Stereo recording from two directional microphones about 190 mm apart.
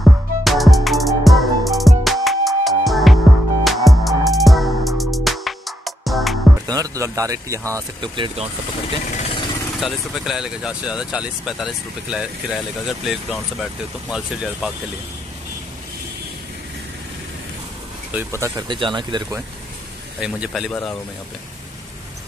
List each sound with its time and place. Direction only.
0.0 s music: centre (ahead or behind)
6.7 s speech: 20° right (ahead or behind)
9.1 s vehicle: 30° left (ahead or behind)
9.8 s speech: centre (ahead or behind)
18.1 s speech: 15° right (ahead or behind)
20.2 s speech: 5° right (ahead or behind)